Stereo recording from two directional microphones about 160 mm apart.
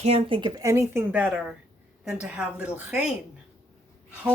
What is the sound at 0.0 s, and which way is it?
A woman's voice, 40° right (ahead or behind).